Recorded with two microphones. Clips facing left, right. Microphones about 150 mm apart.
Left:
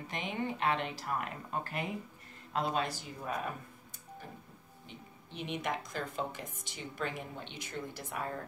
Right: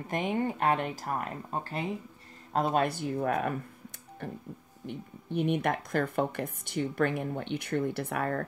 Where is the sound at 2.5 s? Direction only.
50° right (ahead or behind).